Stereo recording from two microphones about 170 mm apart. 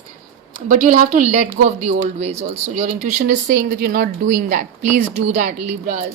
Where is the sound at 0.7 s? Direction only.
50° right (ahead or behind).